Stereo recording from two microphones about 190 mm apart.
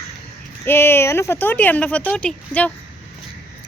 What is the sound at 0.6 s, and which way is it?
Speech, 10° left (ahead or behind).